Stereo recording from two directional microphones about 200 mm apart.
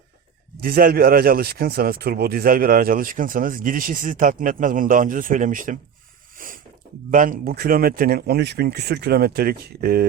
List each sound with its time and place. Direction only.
0.5 s speech: 50° right (ahead or behind)
6.3 s a sound: 45° right (ahead or behind)
7.1 s speech: 40° right (ahead or behind)